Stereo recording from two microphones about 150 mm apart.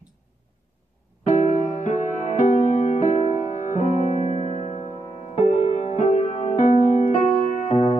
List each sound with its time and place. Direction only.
1.2 s music: 55° left (ahead or behind)